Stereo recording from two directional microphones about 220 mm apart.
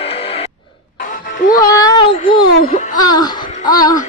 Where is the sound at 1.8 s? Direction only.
20° left (ahead or behind).